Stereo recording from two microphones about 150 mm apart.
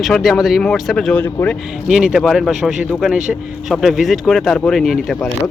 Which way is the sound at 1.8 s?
5° right (ahead or behind).